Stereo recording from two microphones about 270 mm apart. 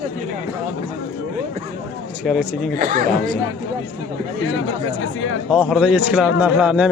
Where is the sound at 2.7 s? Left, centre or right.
Right.